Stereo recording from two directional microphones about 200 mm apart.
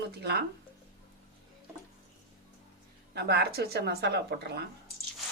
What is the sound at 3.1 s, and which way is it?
A woman's voice, 55° right (ahead or behind).